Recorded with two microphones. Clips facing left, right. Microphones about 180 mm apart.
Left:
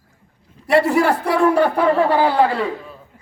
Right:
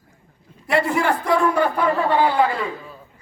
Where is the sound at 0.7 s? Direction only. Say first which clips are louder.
Left 5 dB; 35° left (ahead or behind).